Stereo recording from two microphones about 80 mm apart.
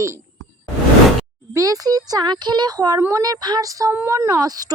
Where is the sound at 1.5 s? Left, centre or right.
Right.